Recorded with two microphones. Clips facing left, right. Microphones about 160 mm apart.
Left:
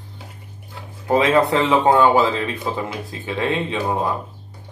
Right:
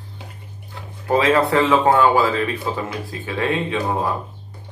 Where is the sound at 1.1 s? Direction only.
20° left (ahead or behind).